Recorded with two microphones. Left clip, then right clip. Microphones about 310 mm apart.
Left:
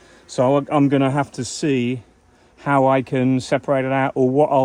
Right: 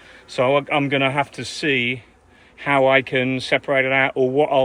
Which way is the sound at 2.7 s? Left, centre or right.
Left.